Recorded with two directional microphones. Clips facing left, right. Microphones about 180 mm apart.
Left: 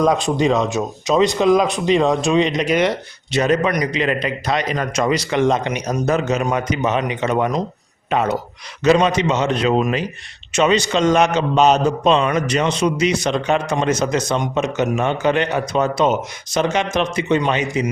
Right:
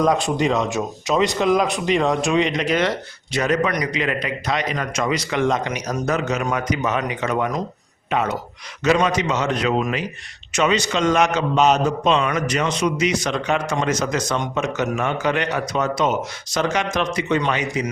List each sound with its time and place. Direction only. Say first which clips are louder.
0.3 s speech: left 3 dB; 25° left (ahead or behind)
2.6 s a man's voice: left 3 dB; 15° left (ahead or behind)